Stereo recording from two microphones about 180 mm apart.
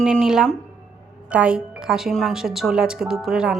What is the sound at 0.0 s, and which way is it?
A woman's voice, 5° right (ahead or behind).